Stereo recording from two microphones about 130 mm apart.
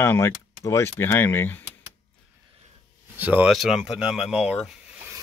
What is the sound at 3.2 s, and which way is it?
Speech, 15° right (ahead or behind).